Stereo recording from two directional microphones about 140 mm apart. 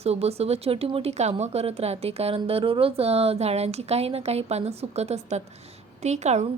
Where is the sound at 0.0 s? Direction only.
45° right (ahead or behind).